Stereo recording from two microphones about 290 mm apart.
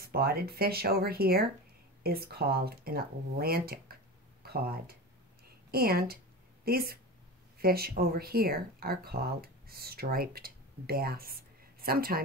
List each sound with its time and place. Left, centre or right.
0.0 s speech: right